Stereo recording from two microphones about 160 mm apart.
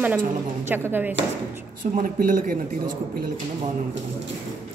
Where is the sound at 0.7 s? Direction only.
15° right (ahead or behind).